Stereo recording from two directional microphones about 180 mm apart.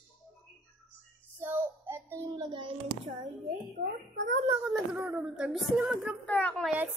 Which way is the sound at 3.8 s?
70° right (ahead or behind).